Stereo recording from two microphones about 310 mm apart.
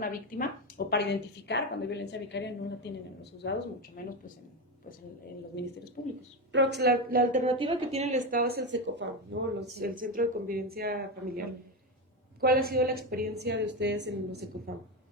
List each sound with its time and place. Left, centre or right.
0.0 s a woman's voice: left
5.5 s a woman's voice: left
6.5 s a woman's voice: right